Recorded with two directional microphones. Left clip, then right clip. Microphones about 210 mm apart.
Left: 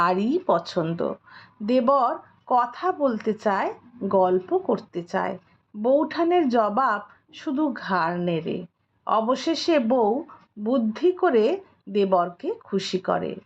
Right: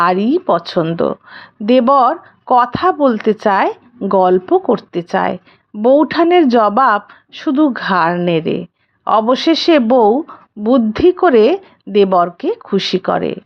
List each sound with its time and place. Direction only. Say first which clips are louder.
0.0 s speech: right 9 dB; 20° right (ahead or behind)